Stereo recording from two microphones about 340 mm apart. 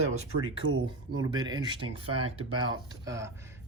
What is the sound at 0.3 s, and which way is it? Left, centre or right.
Speech, right.